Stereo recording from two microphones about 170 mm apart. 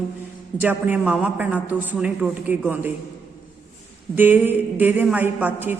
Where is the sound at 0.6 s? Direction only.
10° right (ahead or behind).